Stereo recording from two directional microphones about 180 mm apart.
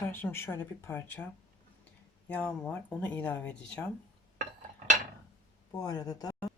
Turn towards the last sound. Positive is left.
turn(degrees=20)  # may be behind; listen again after turning